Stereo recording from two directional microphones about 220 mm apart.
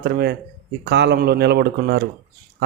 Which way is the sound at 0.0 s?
45° right (ahead or behind).